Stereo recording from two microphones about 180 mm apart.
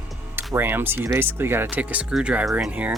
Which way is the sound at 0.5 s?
10° right (ahead or behind).